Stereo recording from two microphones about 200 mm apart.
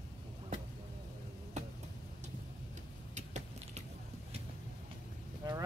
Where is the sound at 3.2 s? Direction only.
35° right (ahead or behind).